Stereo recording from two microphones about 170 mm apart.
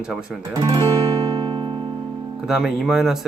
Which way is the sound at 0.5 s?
20° right (ahead or behind).